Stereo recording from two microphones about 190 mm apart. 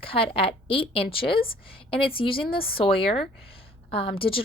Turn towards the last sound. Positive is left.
turn(degrees=30)  # may be behind; listen again after turning